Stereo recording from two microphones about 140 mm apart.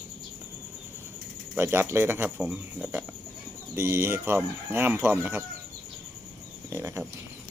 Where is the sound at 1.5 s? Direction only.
15° right (ahead or behind).